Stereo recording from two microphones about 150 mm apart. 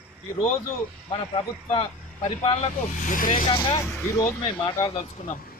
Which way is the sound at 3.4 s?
30° left (ahead or behind).